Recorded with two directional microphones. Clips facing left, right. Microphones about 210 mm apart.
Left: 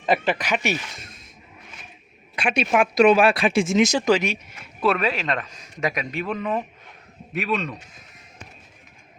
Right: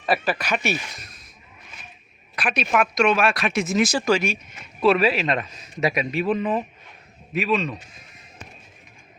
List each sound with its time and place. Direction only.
0.0 s speech: 20° left (ahead or behind)
2.3 s speech: 25° left (ahead or behind)
4.9 s a man's voice: 5° right (ahead or behind)